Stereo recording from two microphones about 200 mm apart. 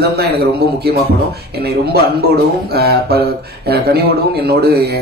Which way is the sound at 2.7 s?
55° right (ahead or behind).